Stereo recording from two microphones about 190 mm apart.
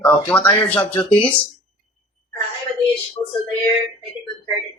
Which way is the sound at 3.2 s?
30° left (ahead or behind).